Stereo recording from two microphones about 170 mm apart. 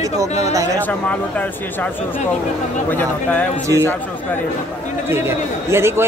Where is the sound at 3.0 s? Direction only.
10° left (ahead or behind).